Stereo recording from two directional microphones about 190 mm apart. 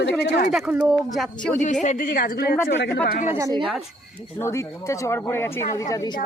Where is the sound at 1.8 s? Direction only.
40° left (ahead or behind).